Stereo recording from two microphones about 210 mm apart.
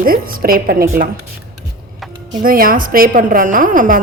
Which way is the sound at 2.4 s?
40° right (ahead or behind).